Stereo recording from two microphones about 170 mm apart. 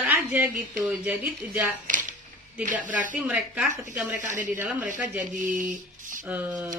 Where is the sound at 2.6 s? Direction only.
50° right (ahead or behind).